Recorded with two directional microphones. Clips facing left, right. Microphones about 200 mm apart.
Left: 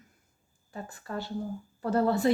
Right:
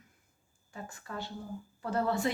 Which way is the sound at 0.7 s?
35° left (ahead or behind).